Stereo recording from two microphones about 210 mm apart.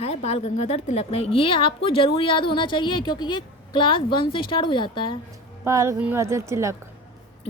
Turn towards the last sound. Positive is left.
turn(degrees=-15)  # may be behind; listen again after turning